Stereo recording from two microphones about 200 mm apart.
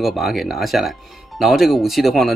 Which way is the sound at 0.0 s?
Centre (ahead or behind).